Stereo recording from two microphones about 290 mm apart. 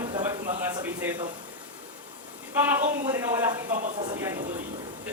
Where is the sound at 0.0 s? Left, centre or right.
Centre.